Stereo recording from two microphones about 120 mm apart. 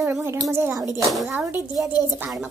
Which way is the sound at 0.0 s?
20° right (ahead or behind).